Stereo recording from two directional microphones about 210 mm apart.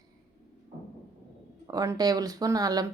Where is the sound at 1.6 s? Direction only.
15° right (ahead or behind).